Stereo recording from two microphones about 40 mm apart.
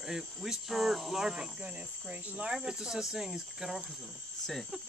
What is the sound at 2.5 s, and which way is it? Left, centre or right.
Speech, centre.